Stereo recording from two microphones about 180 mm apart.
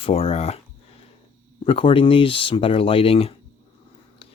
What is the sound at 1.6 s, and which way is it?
Speech, 30° left (ahead or behind).